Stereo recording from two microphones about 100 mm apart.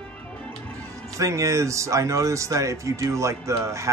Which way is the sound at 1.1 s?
30° right (ahead or behind).